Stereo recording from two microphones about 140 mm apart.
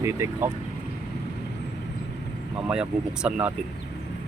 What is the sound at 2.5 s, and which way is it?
Speech, 5° right (ahead or behind).